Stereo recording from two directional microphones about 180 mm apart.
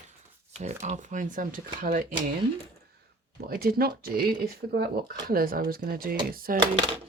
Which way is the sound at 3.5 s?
55° right (ahead or behind).